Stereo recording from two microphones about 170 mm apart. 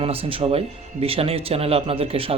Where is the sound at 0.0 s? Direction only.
35° right (ahead or behind).